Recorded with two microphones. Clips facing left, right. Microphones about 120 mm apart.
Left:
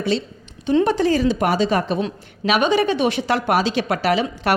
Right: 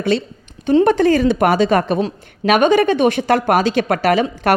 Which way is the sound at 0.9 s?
55° right (ahead or behind).